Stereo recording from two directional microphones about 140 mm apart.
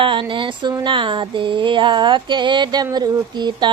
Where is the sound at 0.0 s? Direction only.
35° right (ahead or behind).